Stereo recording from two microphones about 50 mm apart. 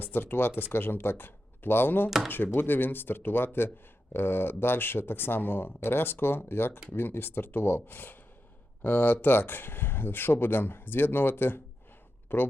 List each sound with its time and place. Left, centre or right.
0.0 s speech: left
2.0 s speech: centre
2.3 s speech: left